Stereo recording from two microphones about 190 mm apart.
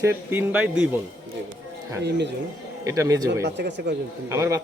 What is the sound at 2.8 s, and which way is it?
Speech, 15° right (ahead or behind).